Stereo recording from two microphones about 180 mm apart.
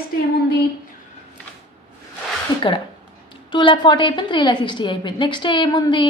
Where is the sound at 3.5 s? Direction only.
25° left (ahead or behind).